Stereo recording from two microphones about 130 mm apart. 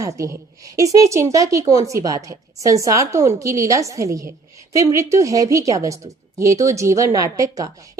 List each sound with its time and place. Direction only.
0.0 s a woman's voice: 25° right (ahead or behind)